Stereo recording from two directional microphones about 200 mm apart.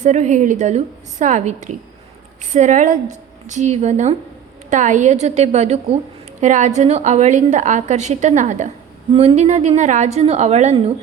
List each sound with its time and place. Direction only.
0.0 s a woman's voice: 35° right (ahead or behind)